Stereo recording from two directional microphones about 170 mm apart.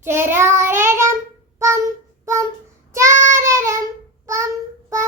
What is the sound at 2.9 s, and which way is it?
Child singing, 15° right (ahead or behind).